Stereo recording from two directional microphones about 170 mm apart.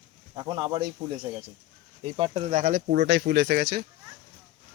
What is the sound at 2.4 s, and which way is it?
Speech, 50° right (ahead or behind).